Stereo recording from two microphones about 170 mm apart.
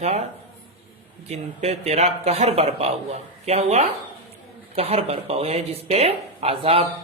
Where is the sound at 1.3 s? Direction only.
40° right (ahead or behind).